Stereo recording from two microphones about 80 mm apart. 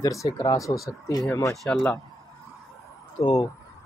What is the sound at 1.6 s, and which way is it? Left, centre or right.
Speech, centre.